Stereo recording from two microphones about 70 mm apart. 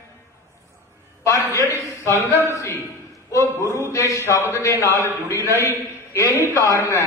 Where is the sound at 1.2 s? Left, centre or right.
Left.